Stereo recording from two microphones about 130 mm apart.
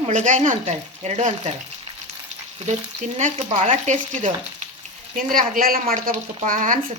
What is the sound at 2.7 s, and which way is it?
Frying, 60° right (ahead or behind).